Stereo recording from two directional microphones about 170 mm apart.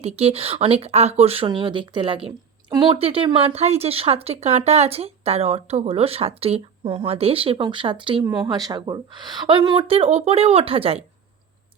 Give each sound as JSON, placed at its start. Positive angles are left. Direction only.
{"t": 0.0, "sound": "speech", "side_deg": -35}
{"t": 8.2, "sound": "speech", "side_deg": -20}